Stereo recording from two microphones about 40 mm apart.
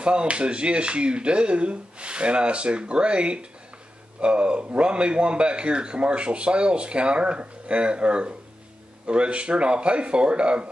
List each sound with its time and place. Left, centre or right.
0.0 s a man's voice: right